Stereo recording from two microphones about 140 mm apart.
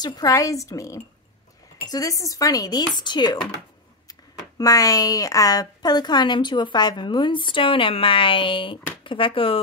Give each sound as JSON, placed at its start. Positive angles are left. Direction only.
{"t": 0.0, "sound": "speech", "side_deg": 25}
{"t": 4.6, "sound": "a woman's voice", "side_deg": 25}